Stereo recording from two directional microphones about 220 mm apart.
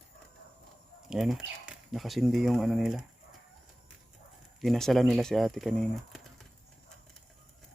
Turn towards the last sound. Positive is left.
turn(degrees=0)  # may be behind; listen again after turning